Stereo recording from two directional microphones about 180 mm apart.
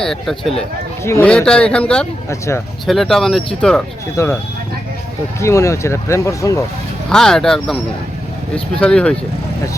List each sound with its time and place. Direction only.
0.0 s a man's voice: centre (ahead or behind)
4.2 s speech: 15° left (ahead or behind)
5.4 s speech: 15° left (ahead or behind)
7.1 s a man's voice: 5° left (ahead or behind)
8.8 s a man's voice: 5° left (ahead or behind)